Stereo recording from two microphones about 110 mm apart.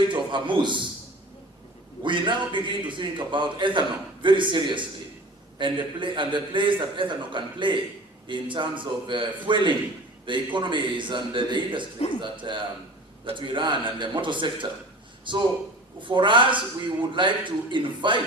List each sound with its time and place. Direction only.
0.1 s a man's voice: 45° right (ahead or behind)
2.0 s a man's voice: 45° right (ahead or behind)